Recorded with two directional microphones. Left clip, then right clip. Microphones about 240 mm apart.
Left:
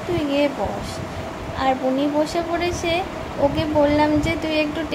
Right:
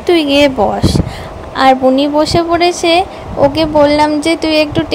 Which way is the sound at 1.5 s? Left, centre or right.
Right.